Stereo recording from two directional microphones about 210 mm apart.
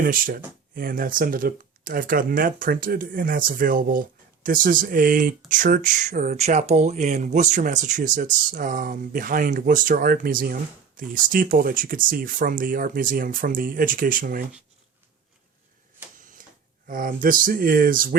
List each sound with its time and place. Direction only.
0.0 s speech: 40° right (ahead or behind)
16.1 s speech: 40° right (ahead or behind)